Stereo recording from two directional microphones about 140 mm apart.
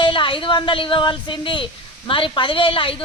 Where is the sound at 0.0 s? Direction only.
35° left (ahead or behind).